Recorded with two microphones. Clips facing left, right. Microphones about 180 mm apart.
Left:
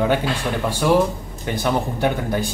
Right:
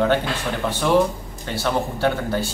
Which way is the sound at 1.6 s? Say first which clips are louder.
Left 1 dB; 15° left (ahead or behind).